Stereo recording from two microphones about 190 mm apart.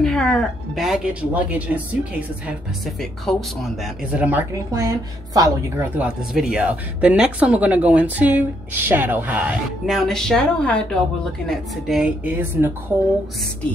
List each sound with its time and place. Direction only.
0.0 s a woman's voice: 5° left (ahead or behind)
3.0 s speech: centre (ahead or behind); by 5.9 s 20° right (ahead or behind)
5.9 s speech: 5° right (ahead or behind)